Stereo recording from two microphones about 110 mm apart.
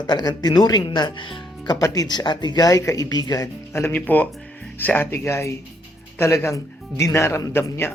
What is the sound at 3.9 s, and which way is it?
Speech, 15° left (ahead or behind).